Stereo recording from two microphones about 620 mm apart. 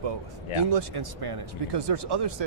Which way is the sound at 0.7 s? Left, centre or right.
Right.